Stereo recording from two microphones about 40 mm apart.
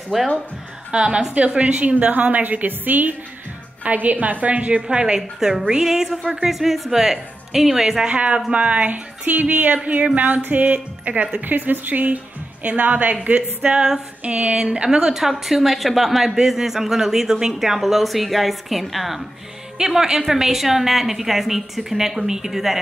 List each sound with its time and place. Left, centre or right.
0.1 s speech: centre
0.9 s a woman's voice: right
3.8 s a woman's voice: right
4.8 s a woman's voice: right
8.0 s a woman's voice: right
14.9 s speech: centre
19.8 s speech: centre